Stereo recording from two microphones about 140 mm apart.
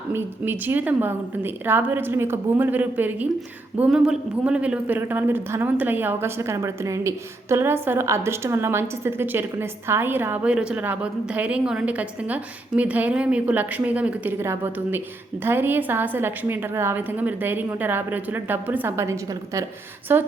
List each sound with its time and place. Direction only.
0.1 s a woman's voice: 15° right (ahead or behind)